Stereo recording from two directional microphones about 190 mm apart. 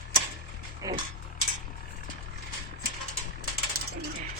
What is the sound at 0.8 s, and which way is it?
Dog, 20° right (ahead or behind).